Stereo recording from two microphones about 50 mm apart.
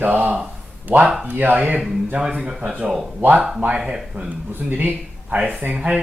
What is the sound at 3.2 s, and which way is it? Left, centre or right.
Speech, right.